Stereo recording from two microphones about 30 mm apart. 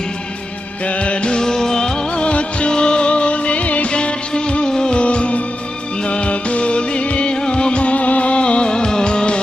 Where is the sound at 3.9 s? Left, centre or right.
Left.